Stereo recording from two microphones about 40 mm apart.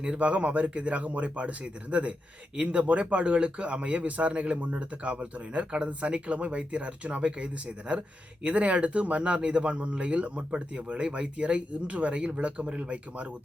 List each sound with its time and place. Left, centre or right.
0.2 s speech: right